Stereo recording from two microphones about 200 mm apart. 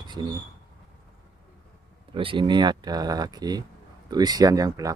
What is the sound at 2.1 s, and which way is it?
Speech, 25° right (ahead or behind).